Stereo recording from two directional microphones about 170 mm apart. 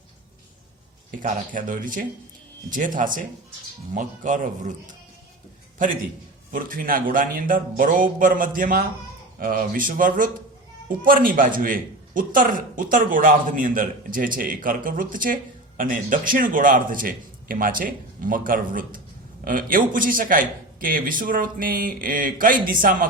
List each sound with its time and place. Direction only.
1.2 s a man's voice: 50° right (ahead or behind)
5.8 s a man's voice: 50° right (ahead or behind)